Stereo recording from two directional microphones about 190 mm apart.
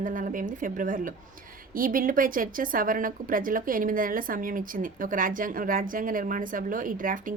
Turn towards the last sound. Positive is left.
turn(degrees=-45)  # may be behind; listen again after turning